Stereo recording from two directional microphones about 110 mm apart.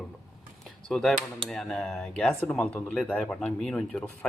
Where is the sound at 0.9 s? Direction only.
5° left (ahead or behind).